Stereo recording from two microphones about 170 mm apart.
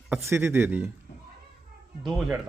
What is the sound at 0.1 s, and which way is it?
Speech, 15° right (ahead or behind).